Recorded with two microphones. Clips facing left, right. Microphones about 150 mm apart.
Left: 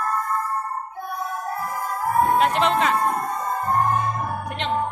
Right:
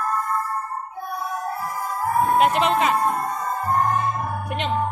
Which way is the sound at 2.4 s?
5° right (ahead or behind).